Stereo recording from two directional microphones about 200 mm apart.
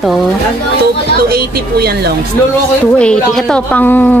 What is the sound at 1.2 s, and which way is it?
Speech, 50° right (ahead or behind).